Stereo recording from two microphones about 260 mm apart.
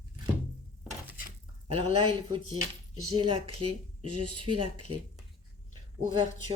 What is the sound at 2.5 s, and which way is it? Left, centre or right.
Speech, right.